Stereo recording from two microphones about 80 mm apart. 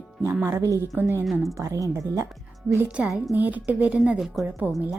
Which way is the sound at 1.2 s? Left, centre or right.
Centre.